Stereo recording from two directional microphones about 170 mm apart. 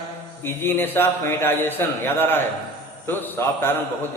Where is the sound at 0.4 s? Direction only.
15° left (ahead or behind).